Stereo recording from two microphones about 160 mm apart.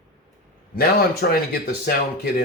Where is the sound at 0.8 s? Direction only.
70° left (ahead or behind).